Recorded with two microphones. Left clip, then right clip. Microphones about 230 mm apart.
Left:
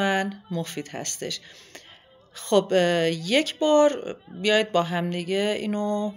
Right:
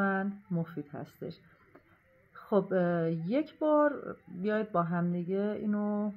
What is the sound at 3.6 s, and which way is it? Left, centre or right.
A woman's voice, left.